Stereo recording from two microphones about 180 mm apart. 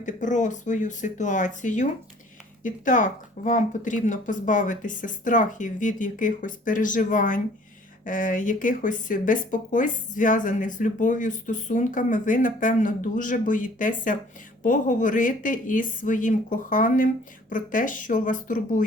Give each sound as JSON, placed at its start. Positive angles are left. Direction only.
{"t": 0.0, "sound": "speech", "side_deg": 45}